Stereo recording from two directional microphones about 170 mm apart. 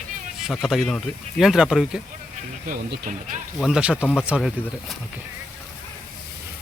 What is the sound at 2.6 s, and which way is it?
Speech, 50° right (ahead or behind).